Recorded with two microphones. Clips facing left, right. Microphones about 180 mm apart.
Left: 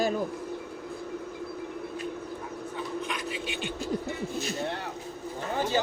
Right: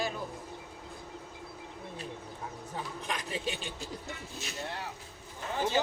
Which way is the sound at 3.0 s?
40° right (ahead or behind).